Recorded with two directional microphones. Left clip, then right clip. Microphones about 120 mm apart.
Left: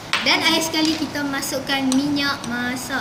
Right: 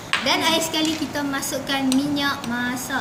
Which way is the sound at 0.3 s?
55° right (ahead or behind).